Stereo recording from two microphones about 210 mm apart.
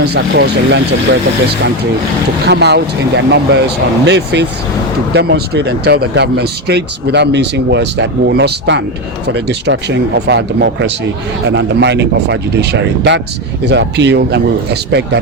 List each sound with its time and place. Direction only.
0.0 s speech: 50° right (ahead or behind)
2.5 s speech: 55° right (ahead or behind)